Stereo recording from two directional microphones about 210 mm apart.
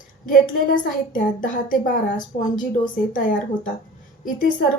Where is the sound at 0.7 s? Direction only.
40° left (ahead or behind).